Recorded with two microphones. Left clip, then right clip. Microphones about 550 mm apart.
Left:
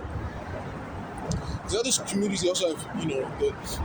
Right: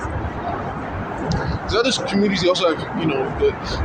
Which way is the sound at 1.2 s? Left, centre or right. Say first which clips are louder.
Right 10 dB; left.